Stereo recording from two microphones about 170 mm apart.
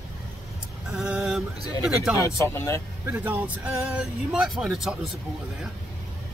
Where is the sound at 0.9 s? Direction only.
Centre (ahead or behind).